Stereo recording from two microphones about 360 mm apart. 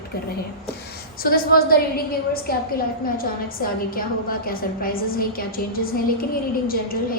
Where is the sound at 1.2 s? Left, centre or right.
Left.